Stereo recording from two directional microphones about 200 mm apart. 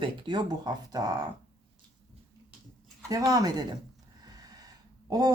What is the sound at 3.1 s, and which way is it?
Speech, 15° right (ahead or behind).